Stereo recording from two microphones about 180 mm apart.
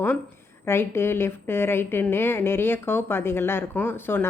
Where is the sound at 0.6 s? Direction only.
15° left (ahead or behind).